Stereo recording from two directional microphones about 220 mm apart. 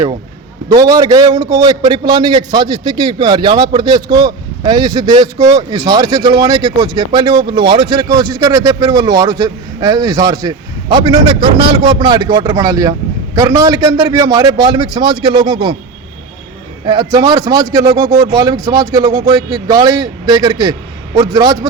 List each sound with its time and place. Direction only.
0.7 s a man's voice: 15° right (ahead or behind)
16.8 s a man's voice: 20° right (ahead or behind)